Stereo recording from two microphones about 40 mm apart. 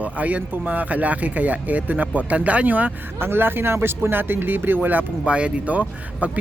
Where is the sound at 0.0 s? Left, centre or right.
Right.